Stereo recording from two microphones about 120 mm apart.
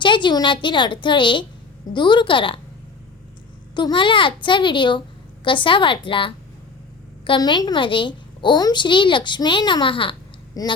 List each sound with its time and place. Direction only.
0.0 s a woman's voice: 40° left (ahead or behind)
3.8 s a child's voice: 40° left (ahead or behind)
10.5 s a woman's voice: 30° left (ahead or behind)